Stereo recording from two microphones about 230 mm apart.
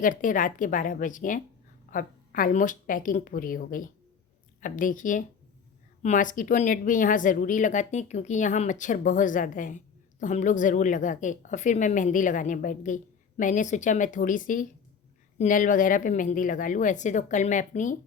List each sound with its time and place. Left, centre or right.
0.0 s speech: left